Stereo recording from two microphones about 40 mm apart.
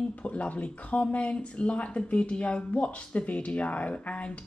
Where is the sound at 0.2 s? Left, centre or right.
Left.